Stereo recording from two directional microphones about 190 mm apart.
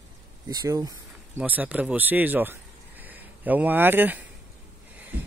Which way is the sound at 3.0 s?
10° right (ahead or behind).